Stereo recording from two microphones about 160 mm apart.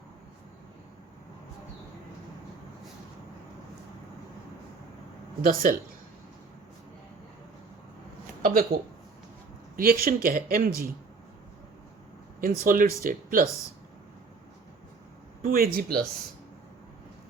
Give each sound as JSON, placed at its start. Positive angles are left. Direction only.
{"t": 5.4, "sound": "speech", "side_deg": -60}
{"t": 8.4, "sound": "a sound", "side_deg": -65}
{"t": 9.7, "sound": "speech", "side_deg": -65}
{"t": 12.4, "sound": "speech", "side_deg": -60}
{"t": 15.4, "sound": "speech", "side_deg": -65}